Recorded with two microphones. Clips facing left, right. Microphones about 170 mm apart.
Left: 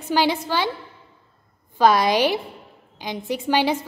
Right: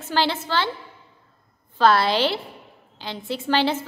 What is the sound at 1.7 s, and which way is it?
A woman's voice, 15° left (ahead or behind).